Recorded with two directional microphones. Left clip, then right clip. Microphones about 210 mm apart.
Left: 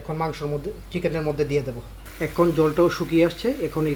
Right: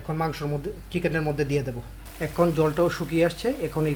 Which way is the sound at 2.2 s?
5° left (ahead or behind).